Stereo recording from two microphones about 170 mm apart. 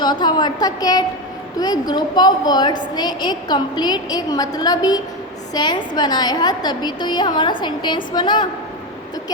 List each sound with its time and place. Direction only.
0.0 s a woman's voice: 25° left (ahead or behind)